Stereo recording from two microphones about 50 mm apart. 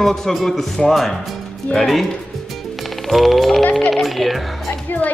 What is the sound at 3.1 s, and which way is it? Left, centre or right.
Speech, centre.